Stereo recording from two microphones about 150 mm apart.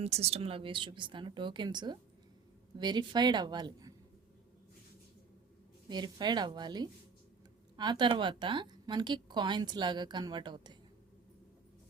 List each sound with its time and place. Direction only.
0.0 s a woman's voice: 45° right (ahead or behind); by 3.9 s 25° right (ahead or behind)
5.9 s a woman's voice: 30° right (ahead or behind)